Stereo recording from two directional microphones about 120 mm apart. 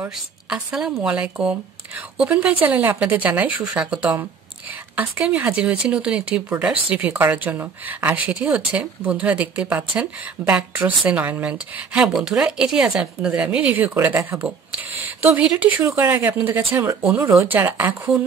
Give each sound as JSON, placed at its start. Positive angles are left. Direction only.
{"t": 0.5, "sound": "speech", "side_deg": -5}
{"t": 5.2, "sound": "speech", "side_deg": -10}